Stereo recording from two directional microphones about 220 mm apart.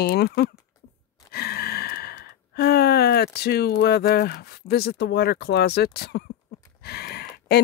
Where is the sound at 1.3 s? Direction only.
45° left (ahead or behind).